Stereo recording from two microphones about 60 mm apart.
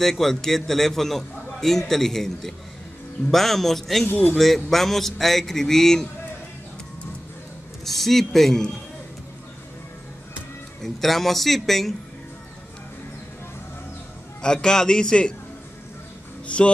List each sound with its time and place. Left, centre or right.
0.0 s a man's voice: centre
4.1 s a man's voice: left
4.6 s a man's voice: centre
7.8 s a man's voice: centre
10.8 s a man's voice: centre
14.4 s a man's voice: centre
16.4 s music: centre